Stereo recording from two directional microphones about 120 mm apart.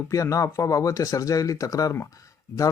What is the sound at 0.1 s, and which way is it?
Speech, 25° left (ahead or behind).